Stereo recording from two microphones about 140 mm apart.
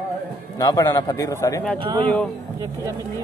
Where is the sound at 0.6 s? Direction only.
30° left (ahead or behind).